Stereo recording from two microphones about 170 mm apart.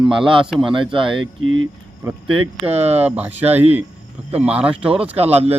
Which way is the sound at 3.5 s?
35° right (ahead or behind).